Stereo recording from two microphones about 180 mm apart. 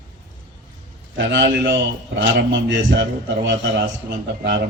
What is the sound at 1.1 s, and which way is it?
A man's voice, 75° right (ahead or behind).